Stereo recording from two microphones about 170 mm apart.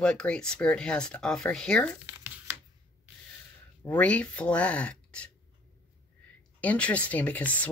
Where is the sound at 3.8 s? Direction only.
10° left (ahead or behind).